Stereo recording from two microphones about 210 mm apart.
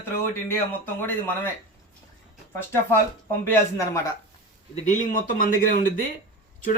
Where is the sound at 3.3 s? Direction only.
10° left (ahead or behind).